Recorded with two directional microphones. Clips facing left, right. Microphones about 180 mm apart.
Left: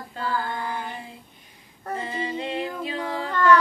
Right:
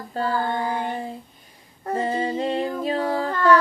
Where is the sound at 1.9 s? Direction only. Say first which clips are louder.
Right 7 dB; 40° right (ahead or behind).